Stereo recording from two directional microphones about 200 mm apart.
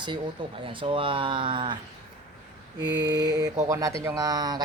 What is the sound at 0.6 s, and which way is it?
Speech, 25° right (ahead or behind).